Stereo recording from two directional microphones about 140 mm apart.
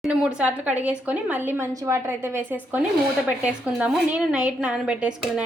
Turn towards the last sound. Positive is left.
turn(degrees=-5)  # may be behind; listen again after turning